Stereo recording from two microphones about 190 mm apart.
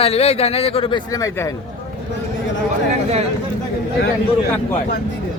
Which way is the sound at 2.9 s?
35° right (ahead or behind).